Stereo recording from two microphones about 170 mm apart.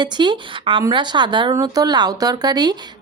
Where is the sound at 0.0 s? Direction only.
25° right (ahead or behind).